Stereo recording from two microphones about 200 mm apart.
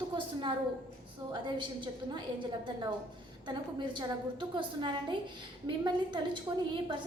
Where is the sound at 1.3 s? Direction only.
25° right (ahead or behind).